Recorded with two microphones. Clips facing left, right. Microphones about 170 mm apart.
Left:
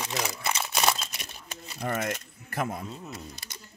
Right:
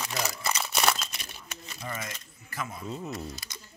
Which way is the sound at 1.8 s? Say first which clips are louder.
Left 9 dB; 60° left (ahead or behind).